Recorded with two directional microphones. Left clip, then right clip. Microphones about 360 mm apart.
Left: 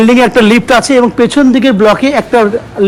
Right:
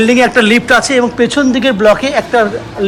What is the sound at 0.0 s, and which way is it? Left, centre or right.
A man's voice, centre.